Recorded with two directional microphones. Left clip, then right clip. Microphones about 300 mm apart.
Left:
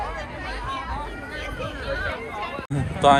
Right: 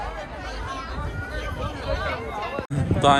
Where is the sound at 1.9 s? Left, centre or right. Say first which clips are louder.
Right 1 dB; right.